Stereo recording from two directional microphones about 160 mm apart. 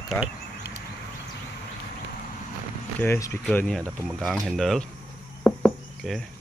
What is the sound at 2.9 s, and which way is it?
Speech, 15° left (ahead or behind).